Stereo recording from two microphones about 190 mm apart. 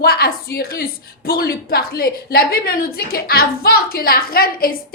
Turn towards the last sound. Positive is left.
turn(degrees=50)  # may be behind; listen again after turning